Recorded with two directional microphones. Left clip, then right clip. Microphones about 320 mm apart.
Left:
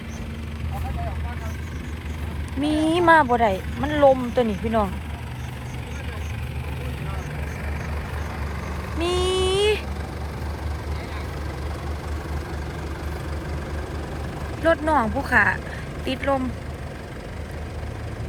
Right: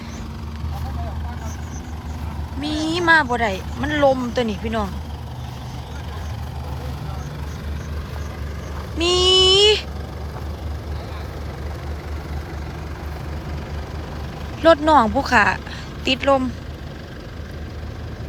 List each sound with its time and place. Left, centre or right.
2.8 s speech: centre
9.0 s a sound: centre
14.6 s speech: centre